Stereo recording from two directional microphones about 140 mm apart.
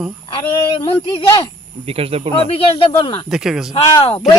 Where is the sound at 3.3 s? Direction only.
5° right (ahead or behind).